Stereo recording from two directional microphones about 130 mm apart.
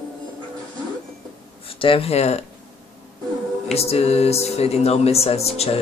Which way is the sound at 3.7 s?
50° left (ahead or behind).